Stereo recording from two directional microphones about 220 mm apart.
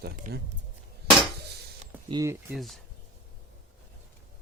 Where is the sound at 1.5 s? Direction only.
50° right (ahead or behind).